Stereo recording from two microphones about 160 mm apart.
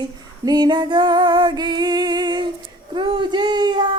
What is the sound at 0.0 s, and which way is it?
Female singing, 25° right (ahead or behind).